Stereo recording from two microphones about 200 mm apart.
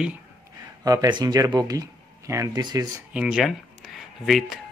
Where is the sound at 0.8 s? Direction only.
20° right (ahead or behind).